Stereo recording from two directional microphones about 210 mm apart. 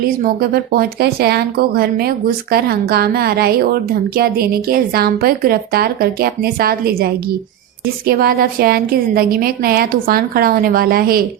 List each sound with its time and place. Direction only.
0.2 s speech: 45° right (ahead or behind)